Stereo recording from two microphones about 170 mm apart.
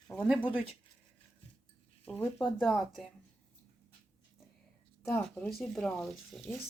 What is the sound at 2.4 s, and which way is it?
Speech, centre (ahead or behind).